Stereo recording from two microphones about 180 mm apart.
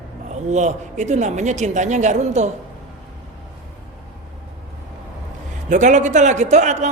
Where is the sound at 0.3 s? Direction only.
40° right (ahead or behind).